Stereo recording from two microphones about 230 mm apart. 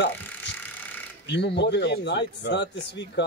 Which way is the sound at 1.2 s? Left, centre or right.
Left.